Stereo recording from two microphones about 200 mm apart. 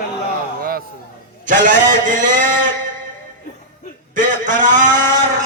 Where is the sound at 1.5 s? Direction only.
40° right (ahead or behind).